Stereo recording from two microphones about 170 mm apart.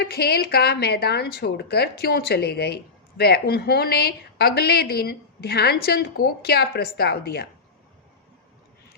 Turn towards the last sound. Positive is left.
turn(degrees=70)  # may be behind; listen again after turning